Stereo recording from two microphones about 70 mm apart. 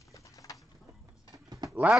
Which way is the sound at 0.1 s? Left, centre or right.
Left.